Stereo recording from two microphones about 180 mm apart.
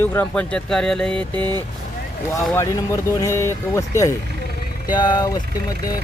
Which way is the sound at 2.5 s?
15° left (ahead or behind).